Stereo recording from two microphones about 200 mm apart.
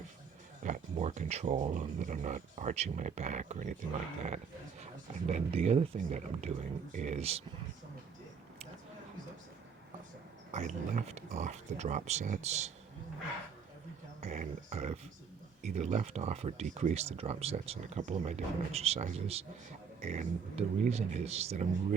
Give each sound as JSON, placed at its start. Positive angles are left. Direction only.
{"t": 0.6, "sound": "speech", "side_deg": -40}
{"t": 5.3, "sound": "speech", "side_deg": -30}
{"t": 10.5, "sound": "speech", "side_deg": -35}
{"t": 14.2, "sound": "speech", "side_deg": -40}